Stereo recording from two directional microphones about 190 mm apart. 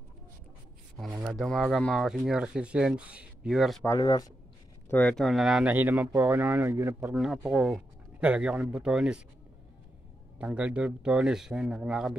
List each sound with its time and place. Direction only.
1.1 s speech: 10° right (ahead or behind)
4.0 s speech: 20° left (ahead or behind)
4.9 s speech: 5° left (ahead or behind); by 7.2 s 15° right (ahead or behind)
7.2 s speech: 5° right (ahead or behind)
10.4 s speech: 5° right (ahead or behind)